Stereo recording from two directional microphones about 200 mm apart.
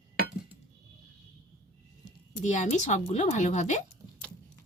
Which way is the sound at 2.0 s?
20° left (ahead or behind).